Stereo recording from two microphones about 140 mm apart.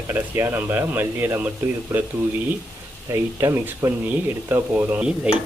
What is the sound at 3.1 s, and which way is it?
Speech, 20° right (ahead or behind).